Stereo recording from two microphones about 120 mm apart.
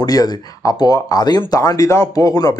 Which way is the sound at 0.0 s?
30° left (ahead or behind).